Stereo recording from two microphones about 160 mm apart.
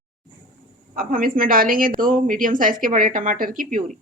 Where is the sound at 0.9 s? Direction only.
60° right (ahead or behind).